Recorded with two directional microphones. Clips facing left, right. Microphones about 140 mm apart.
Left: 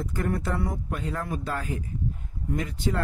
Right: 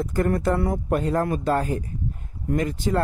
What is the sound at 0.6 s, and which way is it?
Speech, 55° right (ahead or behind).